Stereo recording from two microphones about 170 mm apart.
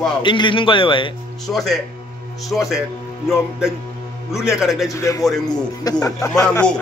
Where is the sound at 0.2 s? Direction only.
30° left (ahead or behind).